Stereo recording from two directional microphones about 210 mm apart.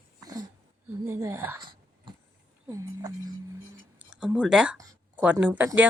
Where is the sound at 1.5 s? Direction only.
20° right (ahead or behind).